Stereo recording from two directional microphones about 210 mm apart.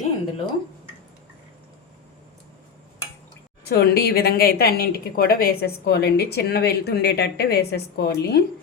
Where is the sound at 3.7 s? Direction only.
50° left (ahead or behind).